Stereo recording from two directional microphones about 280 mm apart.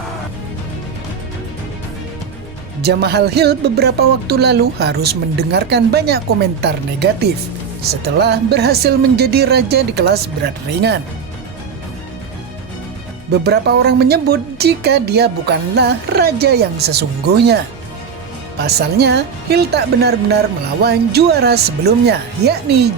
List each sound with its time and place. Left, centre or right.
2.8 s speech: right
13.4 s speech: right
18.6 s speech: right